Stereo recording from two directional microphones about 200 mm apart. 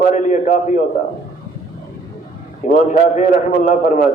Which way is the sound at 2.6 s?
40° left (ahead or behind).